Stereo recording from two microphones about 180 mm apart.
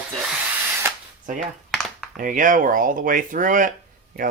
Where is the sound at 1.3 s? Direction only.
45° right (ahead or behind).